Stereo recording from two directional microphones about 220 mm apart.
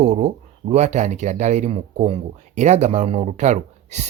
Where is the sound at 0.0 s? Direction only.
30° right (ahead or behind).